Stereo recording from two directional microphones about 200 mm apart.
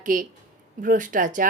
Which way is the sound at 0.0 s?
40° right (ahead or behind).